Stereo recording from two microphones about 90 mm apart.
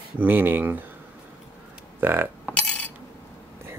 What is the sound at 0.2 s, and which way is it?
Speech, 20° right (ahead or behind).